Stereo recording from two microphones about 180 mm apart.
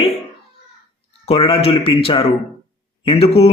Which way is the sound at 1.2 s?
30° left (ahead or behind).